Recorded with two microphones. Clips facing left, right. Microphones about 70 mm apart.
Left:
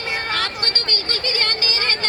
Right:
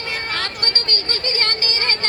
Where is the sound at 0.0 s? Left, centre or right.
Left.